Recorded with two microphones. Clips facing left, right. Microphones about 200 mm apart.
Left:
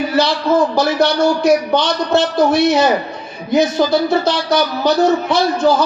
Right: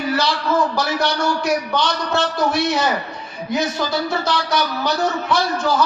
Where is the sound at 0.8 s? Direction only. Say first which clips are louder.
Left 7 dB; 25° left (ahead or behind).